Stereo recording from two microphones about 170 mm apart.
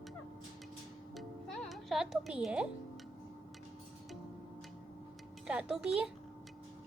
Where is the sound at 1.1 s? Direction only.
Centre (ahead or behind).